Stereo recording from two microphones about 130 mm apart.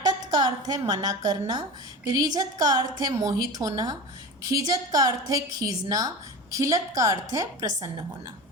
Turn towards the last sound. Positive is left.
turn(degrees=-25)  # may be behind; listen again after turning